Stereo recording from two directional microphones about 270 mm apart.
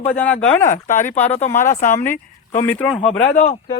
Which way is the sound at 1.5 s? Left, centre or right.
Centre.